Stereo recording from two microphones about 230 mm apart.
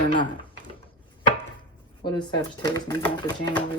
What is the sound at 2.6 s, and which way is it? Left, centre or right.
Speech, centre.